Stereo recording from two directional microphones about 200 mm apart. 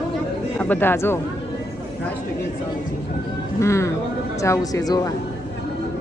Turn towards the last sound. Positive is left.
turn(degrees=20)  # may be behind; listen again after turning